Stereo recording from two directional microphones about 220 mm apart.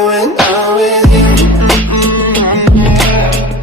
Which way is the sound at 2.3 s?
5° left (ahead or behind).